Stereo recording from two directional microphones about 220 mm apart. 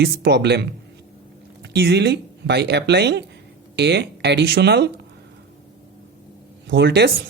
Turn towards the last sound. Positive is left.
turn(degrees=-50)  # may be behind; listen again after turning